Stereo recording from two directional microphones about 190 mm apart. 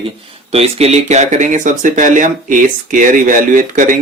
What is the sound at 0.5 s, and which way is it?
Speech, 30° right (ahead or behind).